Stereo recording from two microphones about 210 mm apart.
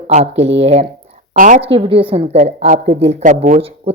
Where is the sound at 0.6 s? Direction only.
30° right (ahead or behind).